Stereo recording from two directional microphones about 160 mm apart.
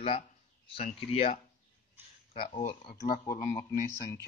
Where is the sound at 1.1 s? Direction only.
35° left (ahead or behind).